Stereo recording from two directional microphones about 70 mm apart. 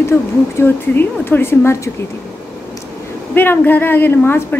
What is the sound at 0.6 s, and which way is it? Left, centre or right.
A woman's voice, left.